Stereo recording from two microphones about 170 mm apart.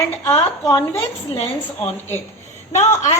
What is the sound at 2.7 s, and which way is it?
Speech, 40° left (ahead or behind).